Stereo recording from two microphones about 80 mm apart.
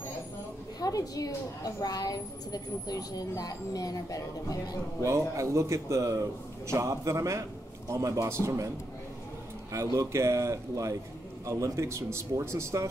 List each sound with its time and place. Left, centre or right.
0.7 s a woman's voice: left
5.0 s speech: right